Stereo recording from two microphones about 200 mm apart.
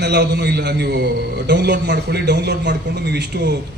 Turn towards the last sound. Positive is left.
turn(degrees=-55)  # may be behind; listen again after turning